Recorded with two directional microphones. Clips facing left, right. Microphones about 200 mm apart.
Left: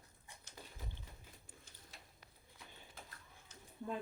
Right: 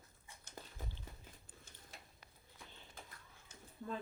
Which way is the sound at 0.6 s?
50° right (ahead or behind).